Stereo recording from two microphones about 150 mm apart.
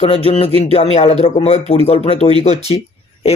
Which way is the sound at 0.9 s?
45° left (ahead or behind).